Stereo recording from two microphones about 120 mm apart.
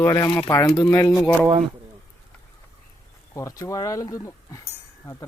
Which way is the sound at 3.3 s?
25° left (ahead or behind).